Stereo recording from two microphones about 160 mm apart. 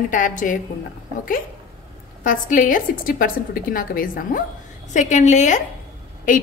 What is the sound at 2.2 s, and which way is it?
A woman's voice, 55° left (ahead or behind).